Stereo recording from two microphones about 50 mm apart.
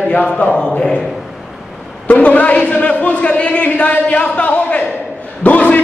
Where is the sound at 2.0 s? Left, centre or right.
Left.